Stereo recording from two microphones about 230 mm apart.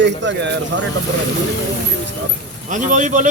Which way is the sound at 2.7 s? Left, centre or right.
Right.